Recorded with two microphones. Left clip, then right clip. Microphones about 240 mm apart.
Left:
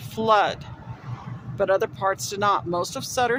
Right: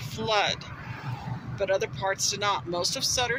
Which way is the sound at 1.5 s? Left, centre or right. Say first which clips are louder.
Left 5 dB; centre.